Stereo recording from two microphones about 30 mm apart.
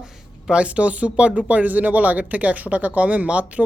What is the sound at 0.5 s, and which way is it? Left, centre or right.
Speech, right.